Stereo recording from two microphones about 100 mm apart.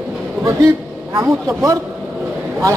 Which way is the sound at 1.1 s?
30° right (ahead or behind).